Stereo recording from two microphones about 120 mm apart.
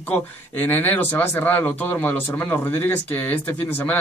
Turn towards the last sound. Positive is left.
turn(degrees=15)  # may be behind; listen again after turning